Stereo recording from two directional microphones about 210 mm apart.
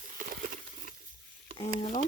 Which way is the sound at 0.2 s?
40° right (ahead or behind).